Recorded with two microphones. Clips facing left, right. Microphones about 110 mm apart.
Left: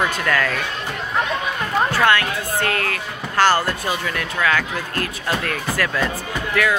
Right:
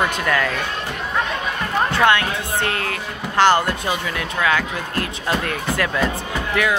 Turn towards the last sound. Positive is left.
turn(degrees=-20)  # may be behind; listen again after turning